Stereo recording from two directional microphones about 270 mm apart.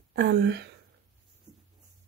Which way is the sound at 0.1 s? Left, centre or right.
Right.